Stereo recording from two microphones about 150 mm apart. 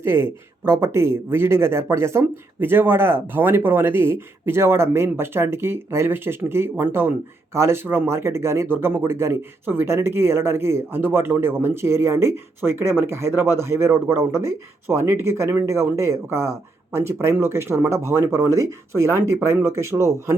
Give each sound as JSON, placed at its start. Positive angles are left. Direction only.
{"t": 0.0, "sound": "speech", "side_deg": -15}